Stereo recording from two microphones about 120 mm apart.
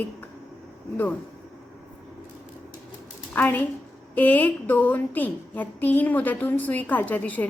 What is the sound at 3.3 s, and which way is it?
A woman's voice, 15° left (ahead or behind).